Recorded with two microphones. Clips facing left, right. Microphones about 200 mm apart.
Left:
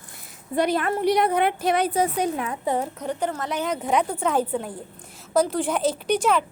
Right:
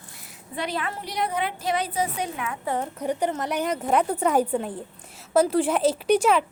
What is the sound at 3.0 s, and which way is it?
A woman's voice, 15° right (ahead or behind).